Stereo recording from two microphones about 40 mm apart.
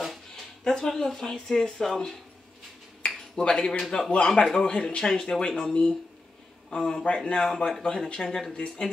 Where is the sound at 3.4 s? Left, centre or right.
Centre.